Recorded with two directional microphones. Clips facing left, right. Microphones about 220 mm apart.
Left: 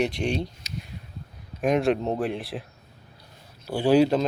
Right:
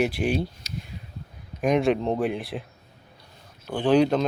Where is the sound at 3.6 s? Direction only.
10° left (ahead or behind).